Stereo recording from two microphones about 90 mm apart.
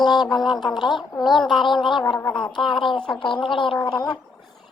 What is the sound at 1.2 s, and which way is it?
Speech, centre (ahead or behind).